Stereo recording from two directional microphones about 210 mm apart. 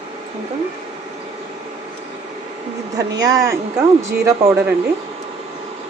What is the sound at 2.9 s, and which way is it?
Speech, 15° right (ahead or behind).